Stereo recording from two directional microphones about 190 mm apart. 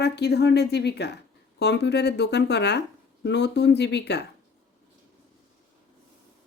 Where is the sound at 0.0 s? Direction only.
60° left (ahead or behind).